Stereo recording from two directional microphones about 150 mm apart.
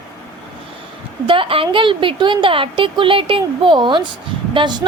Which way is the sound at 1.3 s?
35° right (ahead or behind).